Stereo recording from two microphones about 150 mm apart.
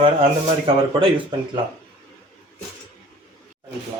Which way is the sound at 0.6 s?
35° right (ahead or behind).